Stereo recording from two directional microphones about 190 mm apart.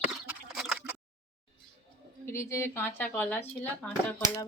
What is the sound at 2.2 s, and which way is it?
Speech, 15° left (ahead or behind).